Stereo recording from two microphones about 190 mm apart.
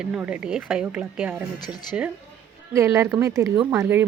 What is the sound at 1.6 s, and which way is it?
Speech, 20° left (ahead or behind).